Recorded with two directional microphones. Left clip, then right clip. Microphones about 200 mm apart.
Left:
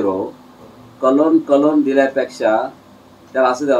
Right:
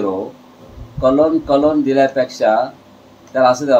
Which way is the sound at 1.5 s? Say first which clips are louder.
Right 1 dB; 30° right (ahead or behind).